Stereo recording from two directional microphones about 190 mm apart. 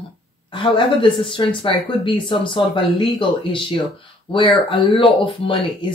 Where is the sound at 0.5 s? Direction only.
25° left (ahead or behind).